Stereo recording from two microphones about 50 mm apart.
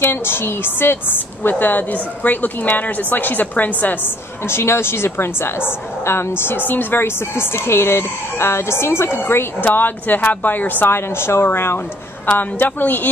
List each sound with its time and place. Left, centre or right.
0.0 s a woman's voice: left
4.5 s a woman's voice: left
9.7 s a woman's voice: left
10.9 s a woman's voice: left
12.3 s a woman's voice: left